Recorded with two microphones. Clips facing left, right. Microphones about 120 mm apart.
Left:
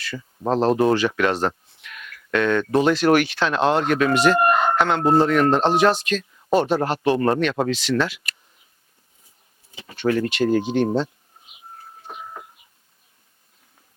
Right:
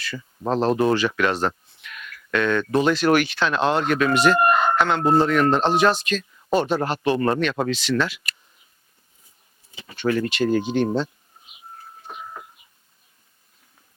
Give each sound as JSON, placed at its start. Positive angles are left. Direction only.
{"t": 0.2, "sound": "speech", "side_deg": 35}
{"t": 0.9, "sound": "speech", "side_deg": 45}
{"t": 5.7, "sound": "speech", "side_deg": 65}
{"t": 8.0, "sound": "speech", "side_deg": 55}
{"t": 9.8, "sound": "speech", "side_deg": 45}
{"t": 10.8, "sound": "speech", "side_deg": 30}
{"t": 12.0, "sound": "doorbell", "side_deg": 30}